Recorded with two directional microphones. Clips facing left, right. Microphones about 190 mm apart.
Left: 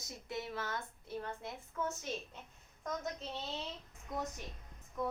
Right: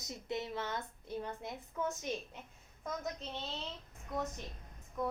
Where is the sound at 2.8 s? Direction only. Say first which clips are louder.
Even; centre (ahead or behind).